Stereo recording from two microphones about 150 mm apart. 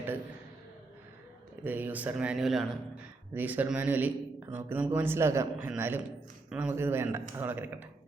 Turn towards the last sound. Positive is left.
turn(degrees=-10)  # may be behind; listen again after turning